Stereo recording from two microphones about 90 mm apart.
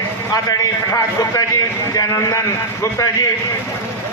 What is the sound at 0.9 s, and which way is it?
A man's voice, 40° left (ahead or behind).